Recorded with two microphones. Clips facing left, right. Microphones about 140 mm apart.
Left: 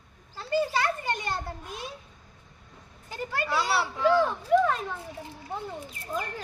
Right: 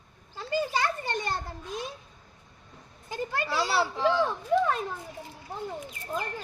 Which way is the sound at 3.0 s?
25° right (ahead or behind).